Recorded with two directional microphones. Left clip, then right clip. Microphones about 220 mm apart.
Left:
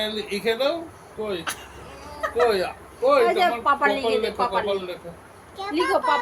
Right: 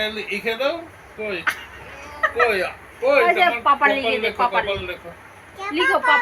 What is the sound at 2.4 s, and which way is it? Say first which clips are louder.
Speech: left 1 dB; 20° left (ahead or behind).